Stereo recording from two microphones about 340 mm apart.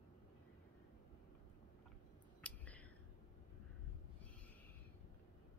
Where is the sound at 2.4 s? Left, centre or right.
Centre.